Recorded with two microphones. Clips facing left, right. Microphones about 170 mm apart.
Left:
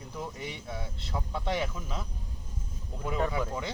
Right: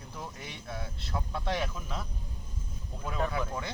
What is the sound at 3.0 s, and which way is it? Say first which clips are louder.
Speech: left 2 dB; 15° left (ahead or behind).